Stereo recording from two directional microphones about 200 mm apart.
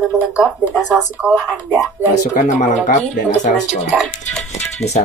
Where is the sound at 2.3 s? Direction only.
40° left (ahead or behind).